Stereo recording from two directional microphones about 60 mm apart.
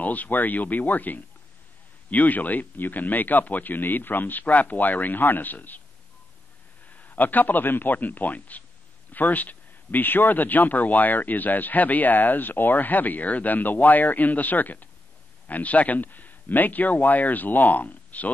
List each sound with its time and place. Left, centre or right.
0.0 s speech: left
7.0 s speech: left